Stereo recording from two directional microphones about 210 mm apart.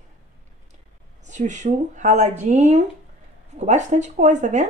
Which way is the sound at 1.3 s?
35° right (ahead or behind).